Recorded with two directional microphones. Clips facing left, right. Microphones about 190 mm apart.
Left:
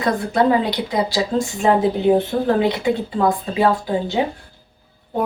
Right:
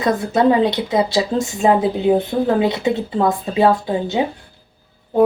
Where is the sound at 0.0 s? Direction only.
25° right (ahead or behind).